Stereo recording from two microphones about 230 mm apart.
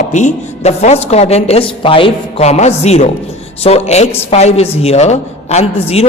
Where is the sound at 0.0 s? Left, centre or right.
Left.